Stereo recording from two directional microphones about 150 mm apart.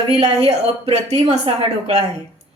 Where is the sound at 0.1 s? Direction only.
45° right (ahead or behind).